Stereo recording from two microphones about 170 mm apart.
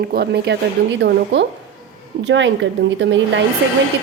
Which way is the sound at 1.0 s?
90° right.